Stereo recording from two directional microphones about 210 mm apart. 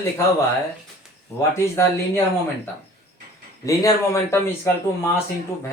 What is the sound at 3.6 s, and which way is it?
Speech, 15° left (ahead or behind).